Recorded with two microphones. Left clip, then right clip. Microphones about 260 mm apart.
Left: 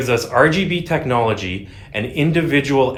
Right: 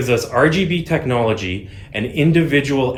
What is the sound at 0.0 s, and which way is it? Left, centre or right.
Speech, left.